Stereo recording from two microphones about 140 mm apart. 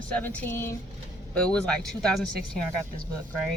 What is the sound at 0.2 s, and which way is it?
A woman's voice, 10° left (ahead or behind).